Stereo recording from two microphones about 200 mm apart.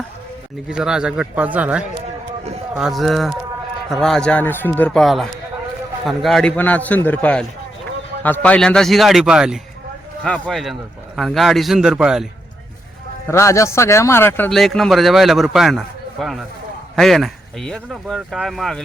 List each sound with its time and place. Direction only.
0.7 s a man's voice: 5° right (ahead or behind)
13.2 s speech: 15° left (ahead or behind)